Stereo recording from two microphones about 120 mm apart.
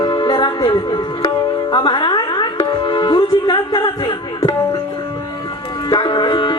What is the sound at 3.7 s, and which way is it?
Speech, 45° left (ahead or behind).